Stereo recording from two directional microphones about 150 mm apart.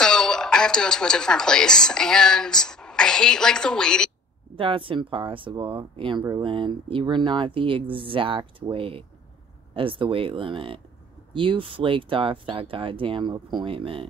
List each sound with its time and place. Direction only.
0.0 s a woman's voice: 5° left (ahead or behind)
4.6 s speech: 35° right (ahead or behind)